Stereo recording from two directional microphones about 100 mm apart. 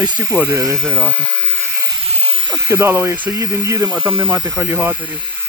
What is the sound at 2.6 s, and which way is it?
Speech, 25° right (ahead or behind).